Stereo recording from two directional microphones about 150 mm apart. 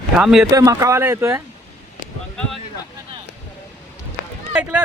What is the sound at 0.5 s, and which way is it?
Speech, 25° right (ahead or behind).